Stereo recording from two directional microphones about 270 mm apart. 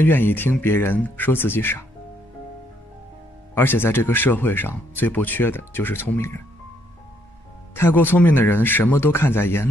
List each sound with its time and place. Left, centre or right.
0.0 s speech: centre
3.5 s speech: centre
7.7 s speech: centre